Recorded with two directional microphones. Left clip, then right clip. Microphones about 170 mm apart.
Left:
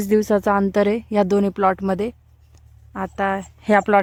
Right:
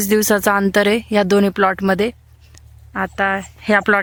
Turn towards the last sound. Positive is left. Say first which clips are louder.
# right 2 dB
turn(degrees=20)  # may be behind; listen again after turning